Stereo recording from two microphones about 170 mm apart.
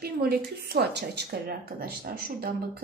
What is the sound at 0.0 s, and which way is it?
A woman's voice, 65° right (ahead or behind).